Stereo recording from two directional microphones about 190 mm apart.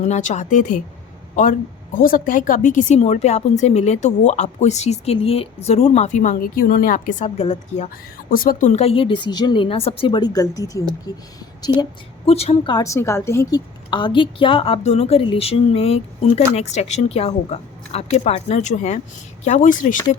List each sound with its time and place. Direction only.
0.0 s speech: 40° left (ahead or behind)
8.3 s speech: 50° left (ahead or behind)
8.7 s a woman's voice: 30° left (ahead or behind)
11.8 s a woman's voice: 30° left (ahead or behind)